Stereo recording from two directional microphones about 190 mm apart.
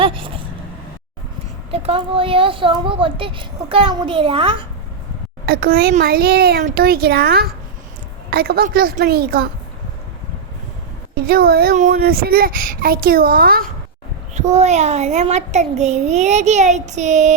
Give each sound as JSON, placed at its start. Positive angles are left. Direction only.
{"t": 0.0, "sound": "a sound", "side_deg": -25}
{"t": 1.7, "sound": "speech", "side_deg": -30}
{"t": 5.5, "sound": "speech", "side_deg": -50}
{"t": 11.1, "sound": "speech", "side_deg": -50}
{"t": 14.3, "sound": "a child's voice", "side_deg": -35}